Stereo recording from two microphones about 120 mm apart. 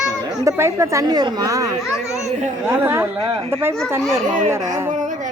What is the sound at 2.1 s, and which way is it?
Speech, 75° right (ahead or behind).